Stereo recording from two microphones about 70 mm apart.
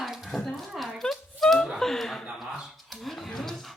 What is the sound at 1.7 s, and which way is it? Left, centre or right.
Speech, centre.